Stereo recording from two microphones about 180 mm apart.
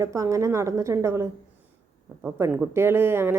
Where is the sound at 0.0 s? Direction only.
15° right (ahead or behind).